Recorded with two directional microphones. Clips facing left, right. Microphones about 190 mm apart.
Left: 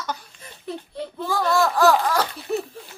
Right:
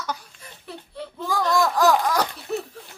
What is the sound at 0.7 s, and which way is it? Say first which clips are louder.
Speech: left 5 dB; 15° left (ahead or behind).